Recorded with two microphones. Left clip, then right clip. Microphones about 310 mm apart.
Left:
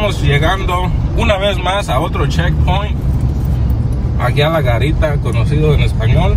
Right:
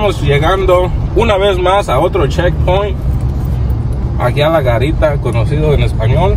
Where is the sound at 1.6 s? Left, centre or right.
Right.